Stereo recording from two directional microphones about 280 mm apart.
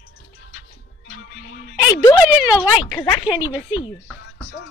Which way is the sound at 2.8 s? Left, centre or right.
Centre.